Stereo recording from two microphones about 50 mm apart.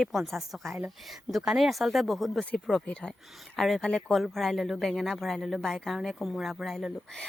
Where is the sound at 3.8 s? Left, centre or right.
Centre.